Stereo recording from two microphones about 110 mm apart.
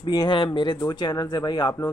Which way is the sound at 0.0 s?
40° left (ahead or behind).